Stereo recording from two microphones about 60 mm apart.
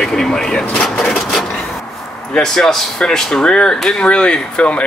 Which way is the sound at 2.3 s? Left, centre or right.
Centre.